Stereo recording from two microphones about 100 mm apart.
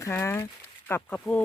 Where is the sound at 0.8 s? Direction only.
20° left (ahead or behind).